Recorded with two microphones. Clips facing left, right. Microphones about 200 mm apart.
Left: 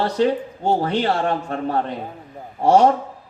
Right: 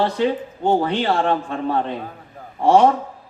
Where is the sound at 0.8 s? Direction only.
45° left (ahead or behind).